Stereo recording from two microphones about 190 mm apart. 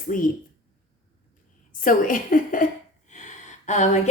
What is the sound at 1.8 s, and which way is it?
Speech, 45° left (ahead or behind).